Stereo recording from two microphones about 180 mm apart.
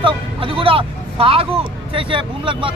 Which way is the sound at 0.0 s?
30° right (ahead or behind).